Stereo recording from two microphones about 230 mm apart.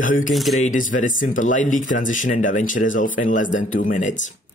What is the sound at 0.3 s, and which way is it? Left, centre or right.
Speech, centre.